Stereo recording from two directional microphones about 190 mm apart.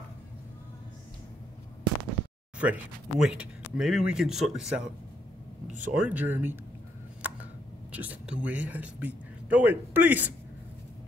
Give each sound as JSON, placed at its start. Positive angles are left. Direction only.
{"t": 2.6, "sound": "speech", "side_deg": -5}
{"t": 5.7, "sound": "speech", "side_deg": -40}
{"t": 6.0, "sound": "speech", "side_deg": -10}
{"t": 7.2, "sound": "tick", "side_deg": -10}
{"t": 7.9, "sound": "speech", "side_deg": -10}